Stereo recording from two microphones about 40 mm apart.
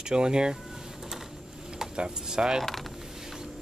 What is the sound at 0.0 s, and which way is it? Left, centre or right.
Speech, centre.